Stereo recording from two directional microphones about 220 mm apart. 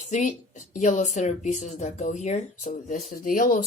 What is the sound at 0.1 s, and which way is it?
A woman's voice, 35° left (ahead or behind).